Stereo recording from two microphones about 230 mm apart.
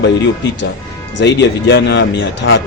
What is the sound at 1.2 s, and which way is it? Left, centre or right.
Speech, left.